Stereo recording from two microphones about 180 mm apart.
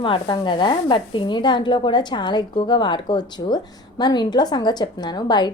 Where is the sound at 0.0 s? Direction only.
25° left (ahead or behind).